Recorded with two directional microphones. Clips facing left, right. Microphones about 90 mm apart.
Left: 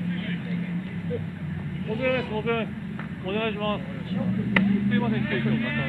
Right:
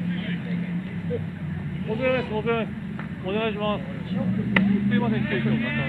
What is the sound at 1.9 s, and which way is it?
Speech, 25° right (ahead or behind).